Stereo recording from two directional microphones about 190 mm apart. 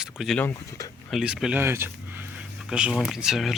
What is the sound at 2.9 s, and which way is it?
Speech, centre (ahead or behind).